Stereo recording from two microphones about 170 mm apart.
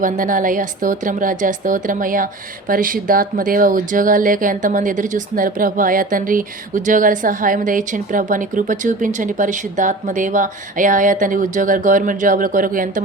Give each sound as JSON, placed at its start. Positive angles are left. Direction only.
{"t": 0.0, "sound": "a woman's voice", "side_deg": -50}